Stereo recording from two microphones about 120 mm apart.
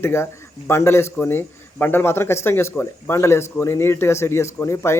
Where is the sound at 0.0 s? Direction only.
20° left (ahead or behind).